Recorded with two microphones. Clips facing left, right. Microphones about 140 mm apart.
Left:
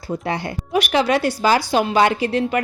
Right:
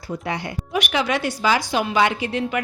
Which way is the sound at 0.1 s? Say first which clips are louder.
Left 3 dB; 30° left (ahead or behind).